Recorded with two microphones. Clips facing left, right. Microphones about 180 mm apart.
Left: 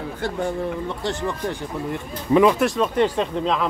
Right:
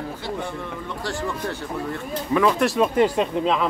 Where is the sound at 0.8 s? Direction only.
20° left (ahead or behind).